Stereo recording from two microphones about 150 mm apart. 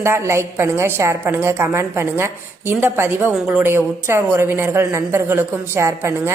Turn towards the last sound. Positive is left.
turn(degrees=-15)  # may be behind; listen again after turning